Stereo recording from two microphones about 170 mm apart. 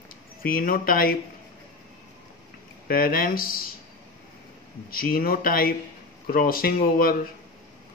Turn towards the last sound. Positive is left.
turn(degrees=60)  # may be behind; listen again after turning